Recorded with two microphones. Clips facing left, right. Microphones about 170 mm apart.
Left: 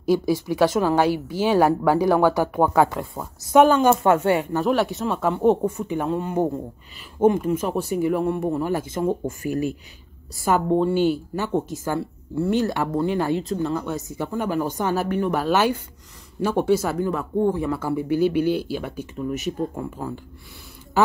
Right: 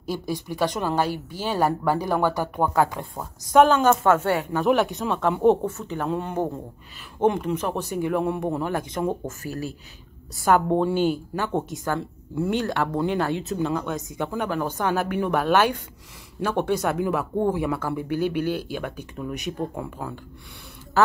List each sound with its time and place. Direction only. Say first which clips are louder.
0.0 s a woman's voice: left 8 dB; 10° left (ahead or behind)
4.5 s speech: even; centre (ahead or behind)
5.6 s a woman's voice: left 4 dB; 10° left (ahead or behind)
6.0 s a woman's voice: left 2 dB; centre (ahead or behind)
10.3 s a woman's voice: even; centre (ahead or behind)
15.0 s a woman's voice: left 1 dB; centre (ahead or behind)
18.1 s speech: left 5 dB; 50° right (ahead or behind)
19.1 s speech: left 5 dB; centre (ahead or behind)